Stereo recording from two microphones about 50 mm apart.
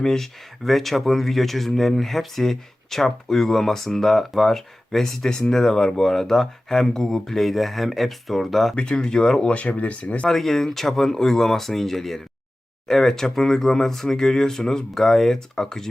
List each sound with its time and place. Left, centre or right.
0.0 s speech: centre
8.7 s speech: centre
10.2 s speech: centre